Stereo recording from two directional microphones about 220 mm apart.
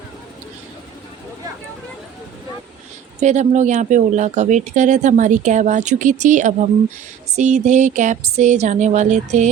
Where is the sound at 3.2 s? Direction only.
30° right (ahead or behind).